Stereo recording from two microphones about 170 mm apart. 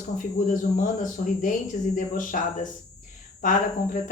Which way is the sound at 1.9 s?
50° left (ahead or behind).